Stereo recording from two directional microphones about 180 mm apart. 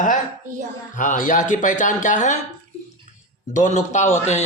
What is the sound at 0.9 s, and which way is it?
A man's voice, 45° left (ahead or behind).